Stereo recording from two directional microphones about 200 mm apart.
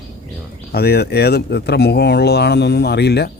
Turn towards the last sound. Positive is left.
turn(degrees=55)  # may be behind; listen again after turning